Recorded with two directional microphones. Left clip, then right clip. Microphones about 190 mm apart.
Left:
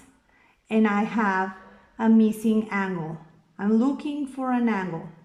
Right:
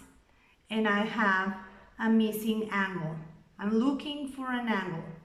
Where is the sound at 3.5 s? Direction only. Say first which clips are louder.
Left 5 dB; 45° left (ahead or behind).